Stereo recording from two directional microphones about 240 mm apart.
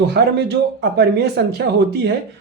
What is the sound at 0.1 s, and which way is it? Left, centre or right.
Speech, right.